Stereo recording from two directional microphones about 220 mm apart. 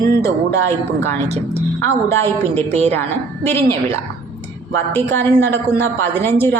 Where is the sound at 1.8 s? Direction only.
10° left (ahead or behind).